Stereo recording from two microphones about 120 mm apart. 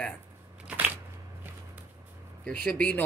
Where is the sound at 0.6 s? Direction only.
10° right (ahead or behind).